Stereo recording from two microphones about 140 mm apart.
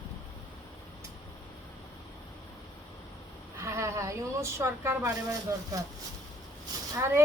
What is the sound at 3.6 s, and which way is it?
A woman's voice, 20° right (ahead or behind).